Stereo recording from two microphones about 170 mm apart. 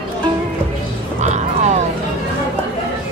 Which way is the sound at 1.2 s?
45° right (ahead or behind).